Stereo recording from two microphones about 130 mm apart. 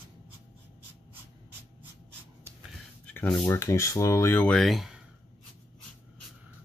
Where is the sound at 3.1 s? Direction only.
10° left (ahead or behind).